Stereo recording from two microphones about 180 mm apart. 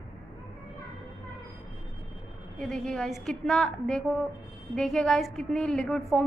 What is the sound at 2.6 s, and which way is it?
A woman's voice, 5° left (ahead or behind).